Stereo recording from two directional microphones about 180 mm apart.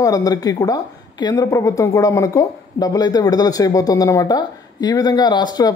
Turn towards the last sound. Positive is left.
turn(degrees=25)  # may be behind; listen again after turning